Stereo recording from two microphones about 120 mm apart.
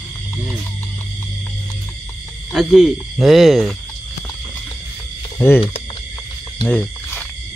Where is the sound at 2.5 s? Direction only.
5° right (ahead or behind).